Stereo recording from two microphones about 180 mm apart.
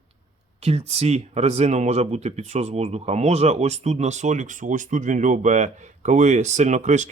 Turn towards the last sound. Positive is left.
turn(degrees=-40)  # may be behind; listen again after turning